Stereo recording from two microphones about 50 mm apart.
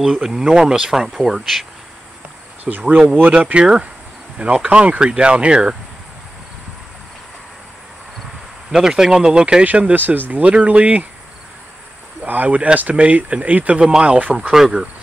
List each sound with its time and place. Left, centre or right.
0.0 s speech: centre
2.7 s speech: right
8.7 s speech: centre
9.7 s speech: right
10.4 s speech: right
12.3 s speech: right
14.5 s speech: centre